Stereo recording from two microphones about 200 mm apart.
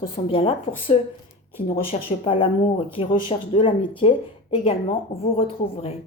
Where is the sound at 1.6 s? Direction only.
30° left (ahead or behind).